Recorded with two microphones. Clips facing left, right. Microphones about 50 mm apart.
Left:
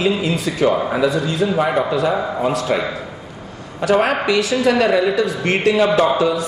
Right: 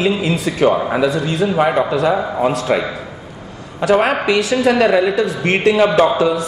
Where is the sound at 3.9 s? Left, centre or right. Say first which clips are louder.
Right 2 dB; right.